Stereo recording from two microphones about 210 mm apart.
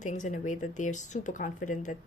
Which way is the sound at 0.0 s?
35° left (ahead or behind).